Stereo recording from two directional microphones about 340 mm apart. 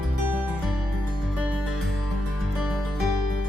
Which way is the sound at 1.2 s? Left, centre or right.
Centre.